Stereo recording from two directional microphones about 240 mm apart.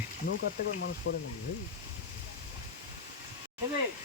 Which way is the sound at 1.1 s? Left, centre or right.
Left.